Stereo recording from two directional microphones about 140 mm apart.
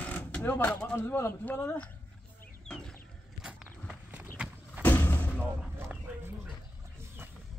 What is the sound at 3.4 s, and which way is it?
Walk, 5° right (ahead or behind).